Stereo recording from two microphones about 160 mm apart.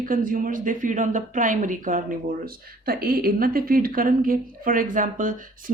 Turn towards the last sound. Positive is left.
turn(degrees=-55)  # may be behind; listen again after turning